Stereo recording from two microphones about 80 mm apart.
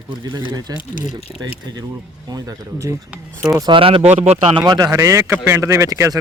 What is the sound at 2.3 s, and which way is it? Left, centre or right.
Speech, right.